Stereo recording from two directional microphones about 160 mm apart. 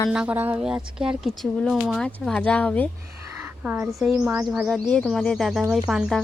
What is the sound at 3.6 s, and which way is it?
Speech, 10° right (ahead or behind).